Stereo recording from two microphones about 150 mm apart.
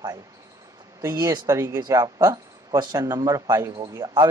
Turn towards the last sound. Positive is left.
turn(degrees=-25)  # may be behind; listen again after turning